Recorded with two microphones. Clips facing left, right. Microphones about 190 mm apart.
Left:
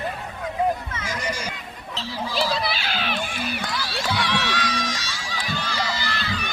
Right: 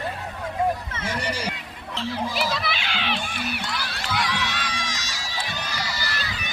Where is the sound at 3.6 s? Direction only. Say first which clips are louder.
Left 2 dB; 60° right (ahead or behind).